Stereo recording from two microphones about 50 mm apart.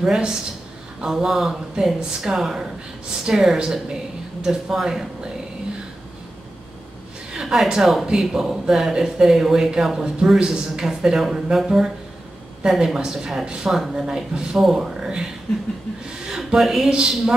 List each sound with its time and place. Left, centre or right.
0.0 s speech: centre
7.3 s a woman's voice: centre
14.6 s speech: centre
15.0 s speech: centre
16.3 s a woman's voice: centre